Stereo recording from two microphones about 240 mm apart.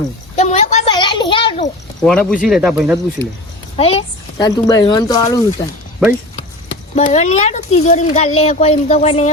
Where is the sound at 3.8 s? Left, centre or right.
Left.